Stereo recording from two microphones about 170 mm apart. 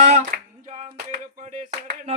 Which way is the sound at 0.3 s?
55° right (ahead or behind).